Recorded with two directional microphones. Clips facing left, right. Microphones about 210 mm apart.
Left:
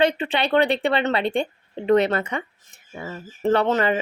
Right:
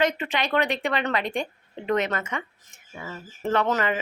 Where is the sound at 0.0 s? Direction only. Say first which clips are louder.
Left 4 dB; 30° left (ahead or behind).